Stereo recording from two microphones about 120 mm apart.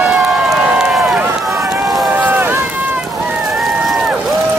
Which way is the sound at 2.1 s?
10° right (ahead or behind).